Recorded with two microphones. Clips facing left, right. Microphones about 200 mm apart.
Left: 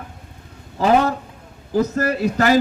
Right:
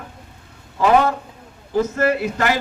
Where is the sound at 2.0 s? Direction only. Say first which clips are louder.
Even; 40° left (ahead or behind).